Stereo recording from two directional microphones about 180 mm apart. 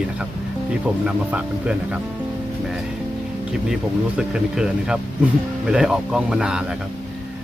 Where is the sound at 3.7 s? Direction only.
5° right (ahead or behind).